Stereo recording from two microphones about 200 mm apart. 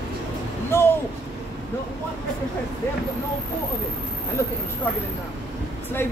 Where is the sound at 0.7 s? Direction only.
10° left (ahead or behind).